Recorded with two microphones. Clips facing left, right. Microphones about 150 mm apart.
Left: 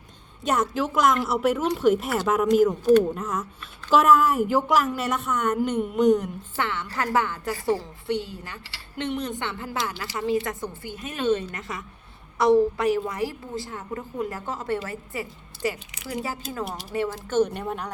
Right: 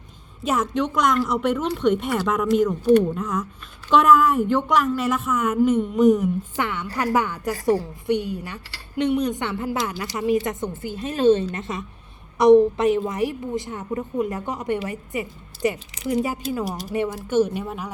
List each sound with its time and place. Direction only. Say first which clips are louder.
0.4 s speech: right 2 dB; centre (ahead or behind)
6.6 s a woman's voice: left 1 dB; 15° right (ahead or behind)
17.2 s a woman's voice: right 2 dB; 10° right (ahead or behind)